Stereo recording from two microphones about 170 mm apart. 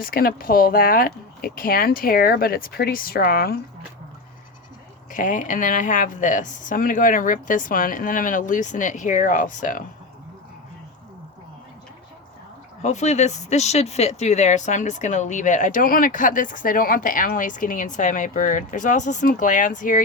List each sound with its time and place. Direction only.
0.0 s speech: 60° left (ahead or behind)
5.1 s speech: 50° left (ahead or behind)
12.8 s speech: 40° left (ahead or behind)